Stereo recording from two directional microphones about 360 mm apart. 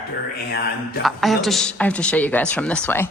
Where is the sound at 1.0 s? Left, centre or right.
Centre.